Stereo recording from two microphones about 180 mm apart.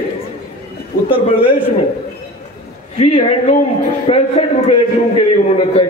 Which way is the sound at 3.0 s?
35° left (ahead or behind).